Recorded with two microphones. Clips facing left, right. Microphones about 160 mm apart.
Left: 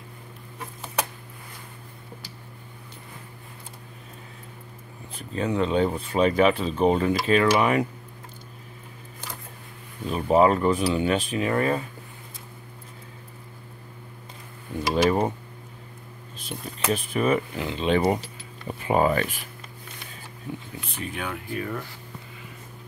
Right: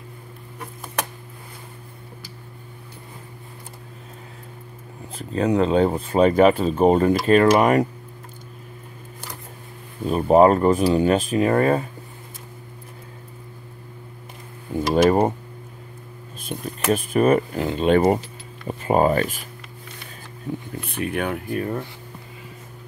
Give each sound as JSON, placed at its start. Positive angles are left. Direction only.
{"t": 5.3, "sound": "speech", "side_deg": -40}
{"t": 10.0, "sound": "speech", "side_deg": -45}
{"t": 15.0, "sound": "a sound", "side_deg": -50}
{"t": 16.4, "sound": "speech", "side_deg": -50}
{"t": 20.8, "sound": "speech", "side_deg": -60}